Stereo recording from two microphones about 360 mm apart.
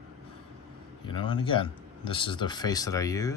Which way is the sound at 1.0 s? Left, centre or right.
Centre.